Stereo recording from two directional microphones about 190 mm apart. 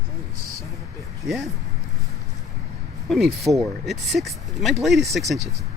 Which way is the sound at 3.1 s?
Centre (ahead or behind).